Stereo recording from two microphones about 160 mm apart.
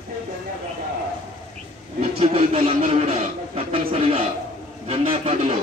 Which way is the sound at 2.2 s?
40° right (ahead or behind).